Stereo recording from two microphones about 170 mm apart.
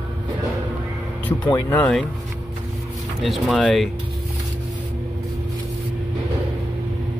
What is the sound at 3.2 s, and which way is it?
Speech, centre (ahead or behind).